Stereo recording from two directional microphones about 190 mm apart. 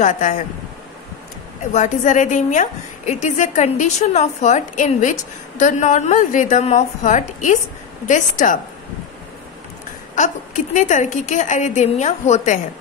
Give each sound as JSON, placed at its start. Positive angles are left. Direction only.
{"t": 0.0, "sound": "speech", "side_deg": 40}
{"t": 1.7, "sound": "a woman's voice", "side_deg": 40}
{"t": 10.1, "sound": "a woman's voice", "side_deg": 40}